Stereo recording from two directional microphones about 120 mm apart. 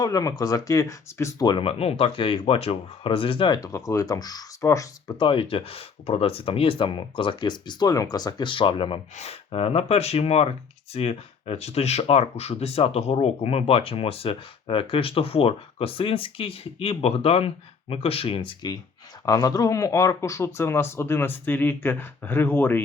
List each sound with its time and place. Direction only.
0.0 s speech: 30° left (ahead or behind)
1.6 s speech: 55° left (ahead or behind); by 3.7 s 40° left (ahead or behind)
3.7 s speech: 25° left (ahead or behind)
5.2 s speech: 45° left (ahead or behind)
9.1 s speech: 60° left (ahead or behind)
19.2 s speech: 30° left (ahead or behind)